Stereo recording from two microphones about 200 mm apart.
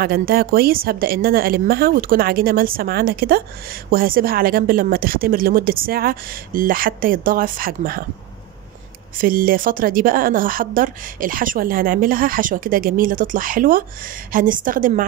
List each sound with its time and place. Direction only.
0.0 s a woman's voice: 50° right (ahead or behind)
9.2 s a woman's voice: 45° right (ahead or behind)